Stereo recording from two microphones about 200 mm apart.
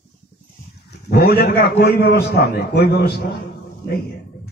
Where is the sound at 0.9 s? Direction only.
50° left (ahead or behind).